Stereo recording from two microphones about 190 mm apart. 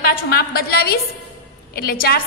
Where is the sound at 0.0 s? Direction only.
55° left (ahead or behind).